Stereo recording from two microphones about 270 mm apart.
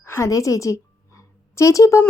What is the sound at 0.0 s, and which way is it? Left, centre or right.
A woman's voice, centre.